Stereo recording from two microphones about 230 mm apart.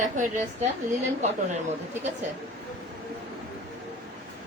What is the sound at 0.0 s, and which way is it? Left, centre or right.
Speech, right.